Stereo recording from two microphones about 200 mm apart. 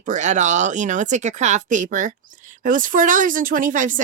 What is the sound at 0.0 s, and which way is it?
Speech, 40° right (ahead or behind).